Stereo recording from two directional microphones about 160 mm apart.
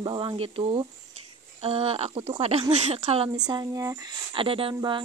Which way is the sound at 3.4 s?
25° right (ahead or behind).